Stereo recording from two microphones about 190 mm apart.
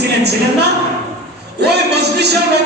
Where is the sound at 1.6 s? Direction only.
60° right (ahead or behind).